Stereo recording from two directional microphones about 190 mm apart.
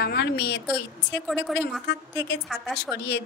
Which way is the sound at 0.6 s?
5° left (ahead or behind).